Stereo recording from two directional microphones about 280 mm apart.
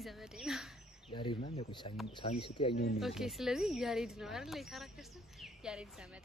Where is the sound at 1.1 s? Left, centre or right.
Centre.